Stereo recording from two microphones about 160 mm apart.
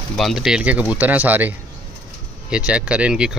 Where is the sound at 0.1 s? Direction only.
Centre (ahead or behind).